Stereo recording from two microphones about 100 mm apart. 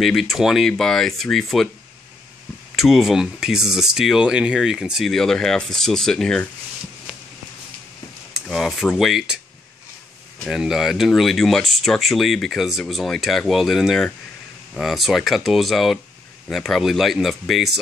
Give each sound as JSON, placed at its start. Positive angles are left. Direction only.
{"t": 0.0, "sound": "speech", "side_deg": 0}
{"t": 2.7, "sound": "speech", "side_deg": -5}
{"t": 8.5, "sound": "speech", "side_deg": 0}
{"t": 10.4, "sound": "speech", "side_deg": -5}